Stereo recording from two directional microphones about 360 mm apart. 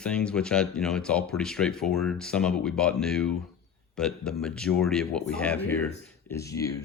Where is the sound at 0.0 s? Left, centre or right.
Centre.